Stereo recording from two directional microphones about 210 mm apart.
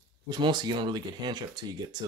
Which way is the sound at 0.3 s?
20° right (ahead or behind).